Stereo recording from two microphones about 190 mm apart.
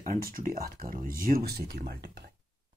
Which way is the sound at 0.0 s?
45° right (ahead or behind).